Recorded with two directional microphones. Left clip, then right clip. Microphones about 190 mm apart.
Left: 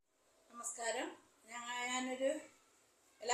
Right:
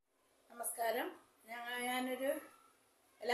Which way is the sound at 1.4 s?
10° right (ahead or behind).